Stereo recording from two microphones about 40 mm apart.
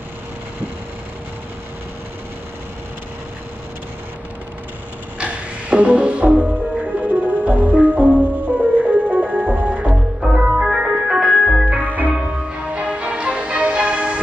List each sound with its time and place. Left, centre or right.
5.2 s music: right
10.5 s organ: centre
11.3 s music: centre
11.8 s music: left
12.2 s music: right